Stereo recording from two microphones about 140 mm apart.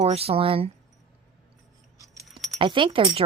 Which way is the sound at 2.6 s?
35° right (ahead or behind).